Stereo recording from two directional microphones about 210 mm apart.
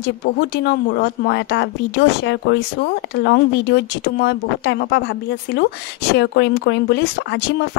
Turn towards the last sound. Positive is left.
turn(degrees=55)  # may be behind; listen again after turning